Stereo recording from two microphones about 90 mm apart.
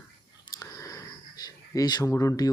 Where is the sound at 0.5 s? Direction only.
35° left (ahead or behind).